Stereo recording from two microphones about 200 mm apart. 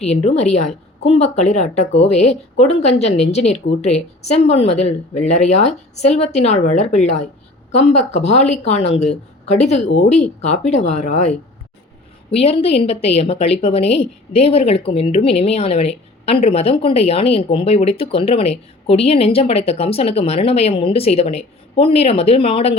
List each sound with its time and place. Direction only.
0.0 s a woman's voice: 30° left (ahead or behind)